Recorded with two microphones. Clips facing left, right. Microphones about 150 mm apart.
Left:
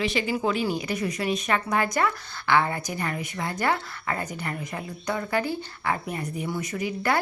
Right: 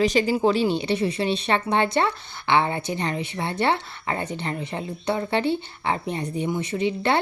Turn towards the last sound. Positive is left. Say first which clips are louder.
# right 4 dB
turn(degrees=-25)  # may be behind; listen again after turning